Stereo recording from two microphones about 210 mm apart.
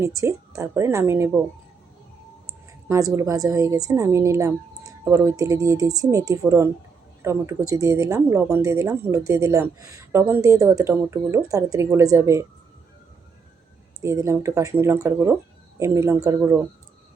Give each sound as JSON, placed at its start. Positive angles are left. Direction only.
{"t": 0.0, "sound": "speech", "side_deg": -15}
{"t": 2.9, "sound": "speech", "side_deg": -15}
{"t": 14.0, "sound": "speech", "side_deg": -15}